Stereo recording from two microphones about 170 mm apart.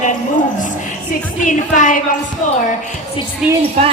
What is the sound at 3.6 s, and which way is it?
Speech, 35° right (ahead or behind).